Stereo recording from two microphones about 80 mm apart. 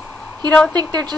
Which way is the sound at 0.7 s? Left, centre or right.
Right.